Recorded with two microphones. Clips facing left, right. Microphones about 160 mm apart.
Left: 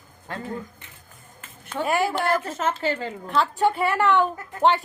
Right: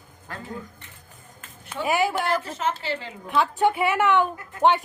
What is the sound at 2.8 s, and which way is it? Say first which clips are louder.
Speech: left 5 dB; 45° left (ahead or behind).